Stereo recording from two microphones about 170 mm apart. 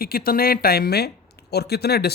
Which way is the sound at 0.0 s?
60° left (ahead or behind).